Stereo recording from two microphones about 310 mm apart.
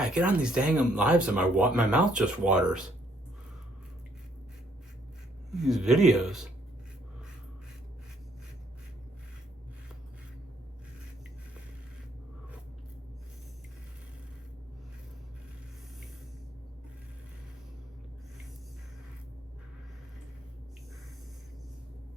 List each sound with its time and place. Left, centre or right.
0.0 s speech: centre
5.5 s speech: centre